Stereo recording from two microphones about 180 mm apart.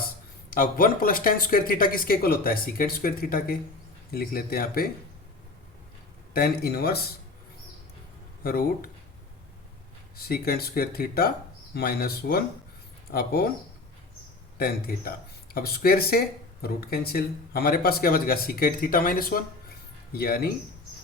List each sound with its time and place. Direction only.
0.5 s speech: 50° left (ahead or behind)
6.3 s speech: 60° left (ahead or behind)
8.4 s speech: 55° left (ahead or behind)
10.2 s speech: 60° left (ahead or behind)
14.6 s speech: 55° left (ahead or behind)